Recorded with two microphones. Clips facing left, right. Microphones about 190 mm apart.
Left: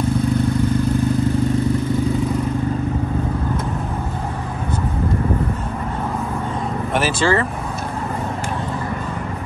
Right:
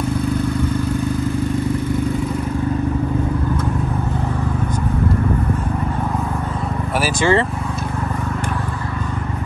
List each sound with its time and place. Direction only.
7.0 s speech: 15° right (ahead or behind)